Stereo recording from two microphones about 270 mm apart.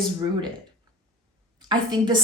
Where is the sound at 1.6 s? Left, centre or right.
Centre.